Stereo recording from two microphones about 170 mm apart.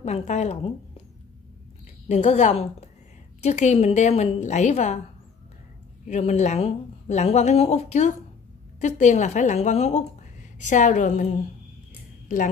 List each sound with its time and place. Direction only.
0.0 s a woman's voice: 40° left (ahead or behind)
2.0 s a woman's voice: 45° left (ahead or behind)
6.0 s a woman's voice: 40° left (ahead or behind)